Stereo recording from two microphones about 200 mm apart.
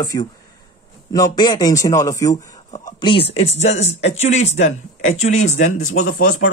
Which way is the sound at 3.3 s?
35° left (ahead or behind).